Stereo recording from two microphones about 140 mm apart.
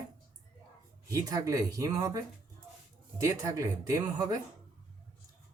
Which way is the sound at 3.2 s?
20° right (ahead or behind).